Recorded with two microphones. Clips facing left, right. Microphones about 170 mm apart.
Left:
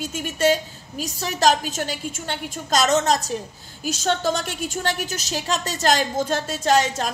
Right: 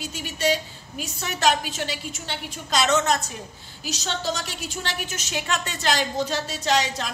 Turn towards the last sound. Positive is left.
turn(degrees=50)  # may be behind; listen again after turning